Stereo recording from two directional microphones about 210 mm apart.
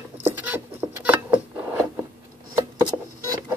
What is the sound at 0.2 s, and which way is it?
Keys jangling, 10° right (ahead or behind).